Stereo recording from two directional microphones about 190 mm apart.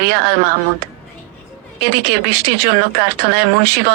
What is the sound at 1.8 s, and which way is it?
Speech, 55° right (ahead or behind).